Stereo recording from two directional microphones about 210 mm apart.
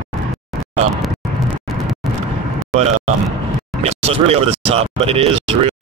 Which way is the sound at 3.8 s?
30° right (ahead or behind).